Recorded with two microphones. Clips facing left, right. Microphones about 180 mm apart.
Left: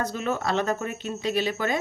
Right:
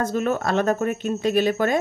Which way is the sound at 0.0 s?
50° right (ahead or behind).